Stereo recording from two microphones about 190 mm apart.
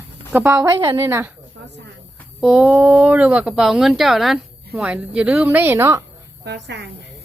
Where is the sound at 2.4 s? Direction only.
5° right (ahead or behind).